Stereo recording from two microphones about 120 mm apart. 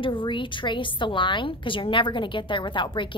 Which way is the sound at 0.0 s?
45° left (ahead or behind).